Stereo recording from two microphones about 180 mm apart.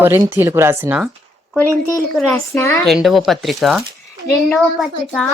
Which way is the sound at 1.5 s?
15° left (ahead or behind).